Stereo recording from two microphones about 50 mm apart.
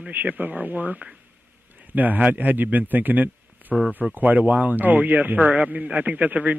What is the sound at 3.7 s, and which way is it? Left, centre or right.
Speech, centre.